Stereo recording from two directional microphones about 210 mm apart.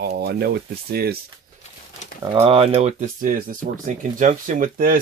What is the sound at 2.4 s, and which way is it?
Speech, 30° right (ahead or behind).